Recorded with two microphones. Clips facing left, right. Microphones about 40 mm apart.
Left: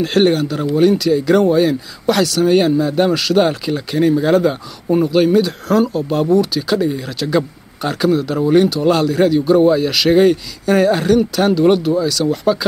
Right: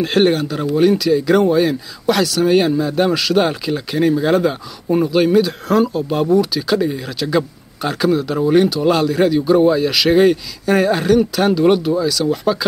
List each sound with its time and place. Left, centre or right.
0.0 s speech: centre